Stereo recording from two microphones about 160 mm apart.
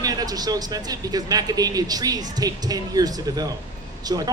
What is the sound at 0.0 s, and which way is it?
Speech, 25° right (ahead or behind).